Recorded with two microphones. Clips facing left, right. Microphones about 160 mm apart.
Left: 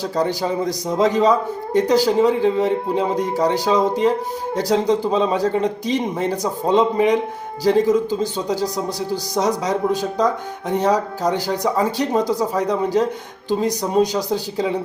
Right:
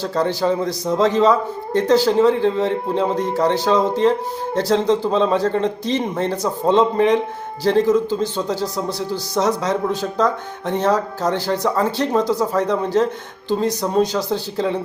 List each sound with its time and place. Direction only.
0.0 s a man's voice: 15° left (ahead or behind)
8.9 s speech: 40° left (ahead or behind)
9.3 s a man's voice: 15° left (ahead or behind)